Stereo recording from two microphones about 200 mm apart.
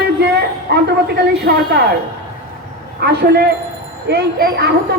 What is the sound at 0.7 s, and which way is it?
Speech, 60° right (ahead or behind).